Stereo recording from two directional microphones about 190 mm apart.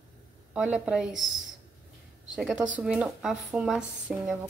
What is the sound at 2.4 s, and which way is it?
A woman's voice, centre (ahead or behind).